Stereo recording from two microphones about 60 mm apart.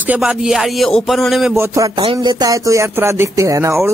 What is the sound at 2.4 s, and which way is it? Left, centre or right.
Speech, right.